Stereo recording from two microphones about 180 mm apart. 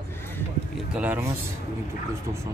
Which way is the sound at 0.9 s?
10° right (ahead or behind).